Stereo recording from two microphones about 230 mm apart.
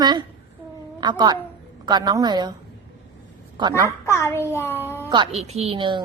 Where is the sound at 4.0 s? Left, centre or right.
Centre.